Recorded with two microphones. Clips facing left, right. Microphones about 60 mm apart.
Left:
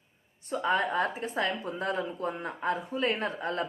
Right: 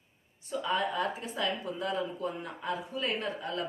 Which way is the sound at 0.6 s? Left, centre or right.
Left.